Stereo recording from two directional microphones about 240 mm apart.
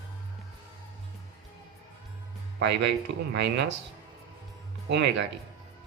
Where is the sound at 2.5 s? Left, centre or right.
Right.